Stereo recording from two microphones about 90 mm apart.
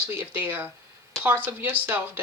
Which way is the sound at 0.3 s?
20° right (ahead or behind).